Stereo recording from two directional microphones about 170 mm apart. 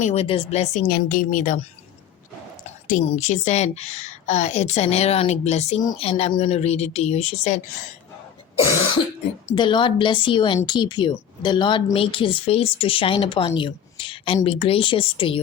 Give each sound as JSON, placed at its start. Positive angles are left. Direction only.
{"t": 0.0, "sound": "speech", "side_deg": 40}
{"t": 2.6, "sound": "a woman's voice", "side_deg": 45}
{"t": 9.6, "sound": "a woman's voice", "side_deg": 30}
{"t": 13.6, "sound": "a sound", "side_deg": 30}
{"t": 14.4, "sound": "a woman's voice", "side_deg": 35}